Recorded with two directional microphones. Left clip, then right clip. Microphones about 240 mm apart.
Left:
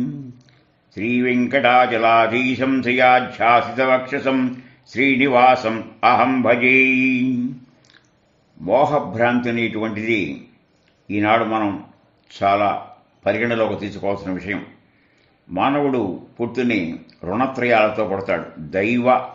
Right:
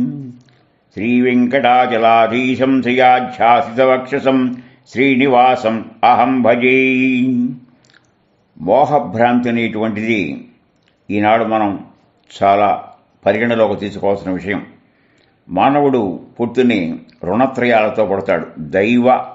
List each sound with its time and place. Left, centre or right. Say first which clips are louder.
0.9 s mantra: right 5 dB; right
8.6 s mantra: right 5 dB; right
12.3 s a man's voice: right 5 dB; right